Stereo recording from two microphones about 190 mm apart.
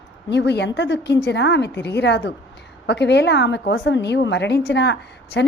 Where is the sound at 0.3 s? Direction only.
65° left (ahead or behind).